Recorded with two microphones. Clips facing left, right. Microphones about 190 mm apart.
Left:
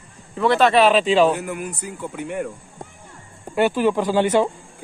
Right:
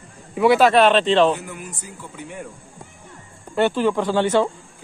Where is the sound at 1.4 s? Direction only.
60° left (ahead or behind).